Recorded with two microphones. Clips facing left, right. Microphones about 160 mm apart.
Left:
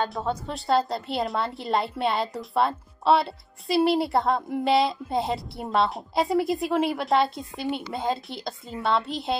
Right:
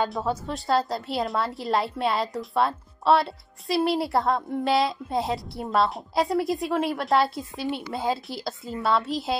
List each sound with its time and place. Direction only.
0.1 s a woman's voice: centre (ahead or behind)